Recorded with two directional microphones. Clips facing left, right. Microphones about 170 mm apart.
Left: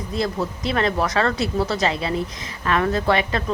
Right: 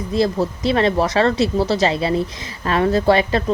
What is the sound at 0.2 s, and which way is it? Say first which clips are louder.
Speech: right 6 dB; 30° right (ahead or behind).